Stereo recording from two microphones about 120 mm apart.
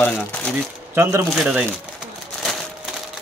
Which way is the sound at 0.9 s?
25° right (ahead or behind).